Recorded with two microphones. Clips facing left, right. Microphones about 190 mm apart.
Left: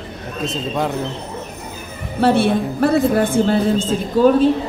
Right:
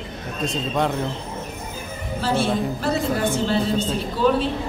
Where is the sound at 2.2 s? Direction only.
60° left (ahead or behind); by 4.5 s 45° left (ahead or behind).